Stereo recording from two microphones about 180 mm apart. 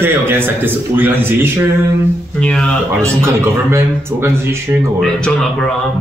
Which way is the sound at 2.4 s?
5° left (ahead or behind).